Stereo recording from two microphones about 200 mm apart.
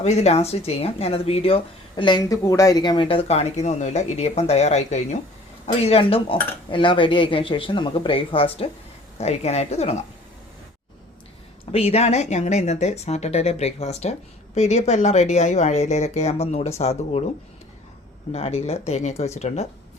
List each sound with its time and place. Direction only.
0.0 s speech: 35° left (ahead or behind)
11.7 s speech: 30° left (ahead or behind)
18.3 s speech: 30° left (ahead or behind)